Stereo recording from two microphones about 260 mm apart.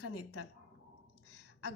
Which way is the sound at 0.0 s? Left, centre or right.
Left.